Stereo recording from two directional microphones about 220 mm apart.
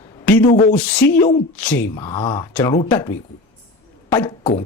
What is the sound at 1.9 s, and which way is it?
Speech, 25° left (ahead or behind).